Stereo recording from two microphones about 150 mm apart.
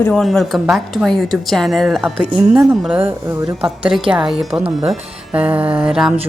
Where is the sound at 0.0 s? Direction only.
Centre (ahead or behind).